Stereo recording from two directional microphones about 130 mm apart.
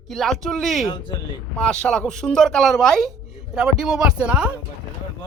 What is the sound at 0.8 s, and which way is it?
Speech, 40° left (ahead or behind).